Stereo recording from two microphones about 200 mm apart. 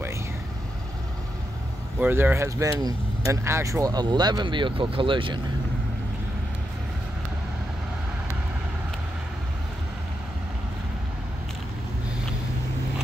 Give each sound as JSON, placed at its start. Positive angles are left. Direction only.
{"t": 2.0, "sound": "speech", "side_deg": -10}